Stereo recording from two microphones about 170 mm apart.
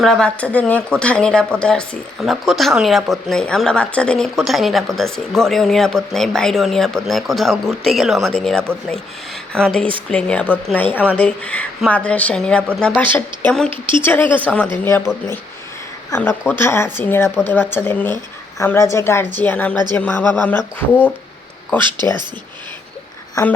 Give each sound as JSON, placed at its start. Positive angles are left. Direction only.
{"t": 0.0, "sound": "speech", "side_deg": 5}
{"t": 13.7, "sound": "speech", "side_deg": -30}
{"t": 14.0, "sound": "speech", "side_deg": 10}
{"t": 15.1, "sound": "speech", "side_deg": -5}
{"t": 16.0, "sound": "speech", "side_deg": 15}